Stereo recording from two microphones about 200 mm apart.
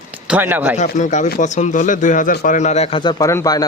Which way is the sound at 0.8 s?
35° left (ahead or behind).